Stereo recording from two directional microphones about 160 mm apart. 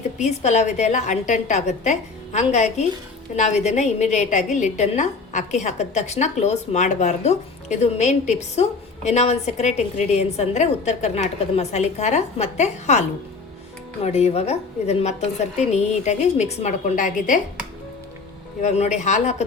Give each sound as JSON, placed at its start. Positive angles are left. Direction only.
{"t": 0.2, "sound": "a woman's voice", "side_deg": 45}
{"t": 18.6, "sound": "a woman's voice", "side_deg": 45}